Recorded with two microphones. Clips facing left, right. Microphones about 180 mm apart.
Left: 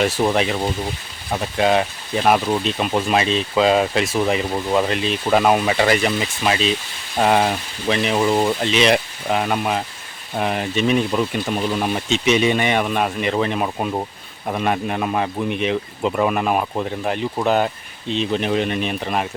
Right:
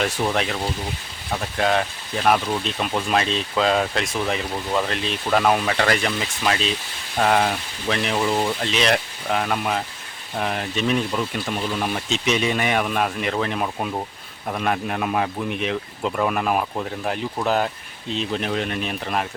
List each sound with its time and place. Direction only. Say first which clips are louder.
0.2 s speech: left 4 dB; 5° left (ahead or behind)
4.5 s speech: left 5 dB; 15° left (ahead or behind)
8.1 s speech: left 4 dB; 15° left (ahead or behind)
8.6 s speech: left 4 dB; centre (ahead or behind)